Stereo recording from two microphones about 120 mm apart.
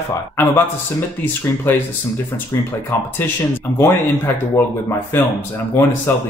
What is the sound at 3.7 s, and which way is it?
Speech, 20° left (ahead or behind).